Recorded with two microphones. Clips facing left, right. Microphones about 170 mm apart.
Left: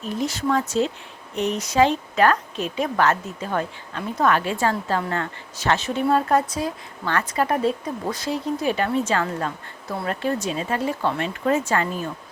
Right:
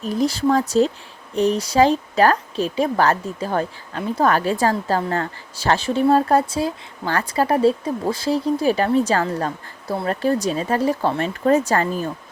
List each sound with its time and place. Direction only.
0.2 s speech: 35° right (ahead or behind)